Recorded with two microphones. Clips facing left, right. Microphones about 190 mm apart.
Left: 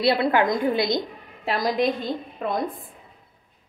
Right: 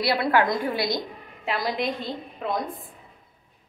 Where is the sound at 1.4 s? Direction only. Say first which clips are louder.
Left 4 dB; 40° left (ahead or behind).